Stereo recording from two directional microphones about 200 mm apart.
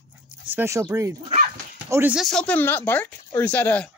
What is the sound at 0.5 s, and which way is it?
A man's voice, 10° right (ahead or behind).